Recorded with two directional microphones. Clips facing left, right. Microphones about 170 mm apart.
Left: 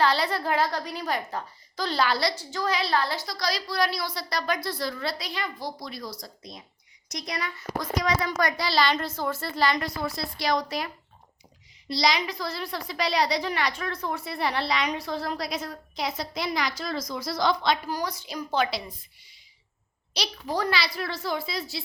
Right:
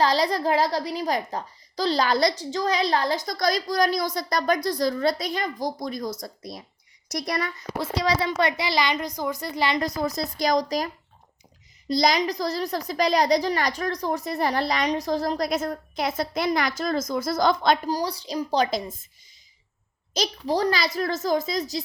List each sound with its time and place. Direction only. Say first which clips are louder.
0.0 s a woman's voice: right 3 dB; 35° right (ahead or behind)
7.1 s a child's voice: right 6 dB; 60° right (ahead or behind)
7.8 s a woman's voice: right 3 dB; 30° right (ahead or behind)
9.8 s a woman's voice: right 5 dB; 40° right (ahead or behind)
17.9 s a woman's voice: right 4 dB; 35° right (ahead or behind)
20.1 s a child's voice: right 5 dB; 40° right (ahead or behind)